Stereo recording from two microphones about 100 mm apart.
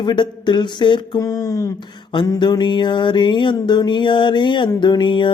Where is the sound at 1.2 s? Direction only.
35° left (ahead or behind).